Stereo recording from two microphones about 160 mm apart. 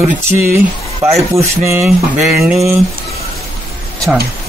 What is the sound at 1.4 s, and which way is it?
Speech, 15° right (ahead or behind).